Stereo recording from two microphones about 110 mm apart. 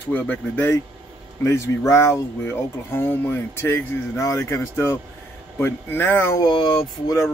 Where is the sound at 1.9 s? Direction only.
25° left (ahead or behind).